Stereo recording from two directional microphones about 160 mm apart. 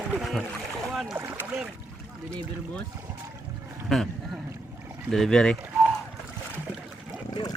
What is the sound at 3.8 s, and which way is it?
Speech, centre (ahead or behind).